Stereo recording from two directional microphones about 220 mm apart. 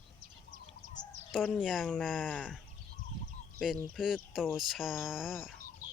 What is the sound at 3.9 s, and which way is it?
Speech, centre (ahead or behind).